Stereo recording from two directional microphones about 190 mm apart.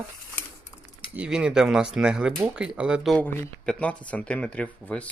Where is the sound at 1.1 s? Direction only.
5° right (ahead or behind).